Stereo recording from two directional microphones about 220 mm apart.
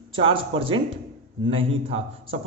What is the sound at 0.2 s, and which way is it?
A man's voice, 25° right (ahead or behind).